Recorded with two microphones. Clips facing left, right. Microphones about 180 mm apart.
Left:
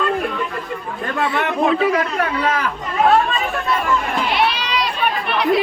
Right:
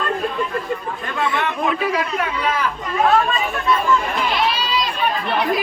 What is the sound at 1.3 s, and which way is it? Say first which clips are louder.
Speech: left 5 dB; 25° left (ahead or behind).